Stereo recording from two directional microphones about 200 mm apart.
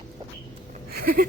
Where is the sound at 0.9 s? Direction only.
45° right (ahead or behind).